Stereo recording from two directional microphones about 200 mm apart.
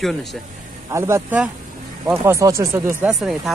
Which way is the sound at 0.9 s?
15° right (ahead or behind).